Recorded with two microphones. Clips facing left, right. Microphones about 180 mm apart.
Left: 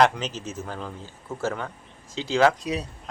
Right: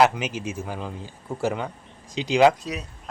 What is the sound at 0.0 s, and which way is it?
A man's voice, 10° right (ahead or behind).